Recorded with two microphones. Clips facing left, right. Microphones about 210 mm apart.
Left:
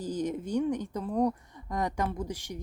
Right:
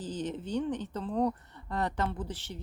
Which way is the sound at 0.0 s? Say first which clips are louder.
Left 4 dB; 10° left (ahead or behind).